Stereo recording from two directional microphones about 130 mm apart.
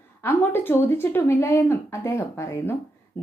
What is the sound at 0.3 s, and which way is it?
Speech, 15° left (ahead or behind).